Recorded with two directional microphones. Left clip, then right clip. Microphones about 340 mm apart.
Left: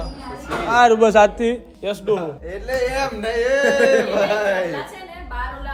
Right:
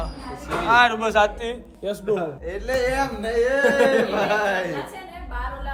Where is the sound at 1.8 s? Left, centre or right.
Centre.